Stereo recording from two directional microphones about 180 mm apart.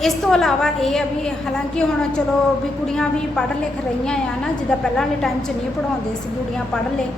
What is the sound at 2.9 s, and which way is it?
Speech, 5° left (ahead or behind).